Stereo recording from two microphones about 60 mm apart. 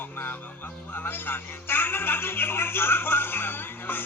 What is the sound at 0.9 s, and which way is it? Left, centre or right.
Speech, left.